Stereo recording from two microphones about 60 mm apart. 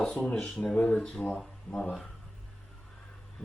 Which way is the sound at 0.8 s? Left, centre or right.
Centre.